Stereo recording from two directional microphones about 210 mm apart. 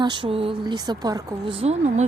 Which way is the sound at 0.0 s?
20° right (ahead or behind).